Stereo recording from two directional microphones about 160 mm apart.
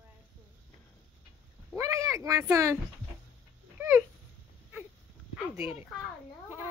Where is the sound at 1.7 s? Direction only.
20° right (ahead or behind).